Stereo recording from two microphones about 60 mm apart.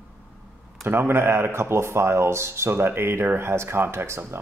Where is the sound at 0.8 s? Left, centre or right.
Right.